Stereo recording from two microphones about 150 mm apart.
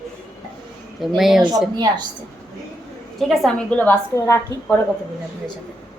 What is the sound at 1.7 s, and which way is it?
Speech, 30° right (ahead or behind).